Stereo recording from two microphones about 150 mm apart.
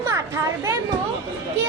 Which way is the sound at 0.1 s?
20° right (ahead or behind).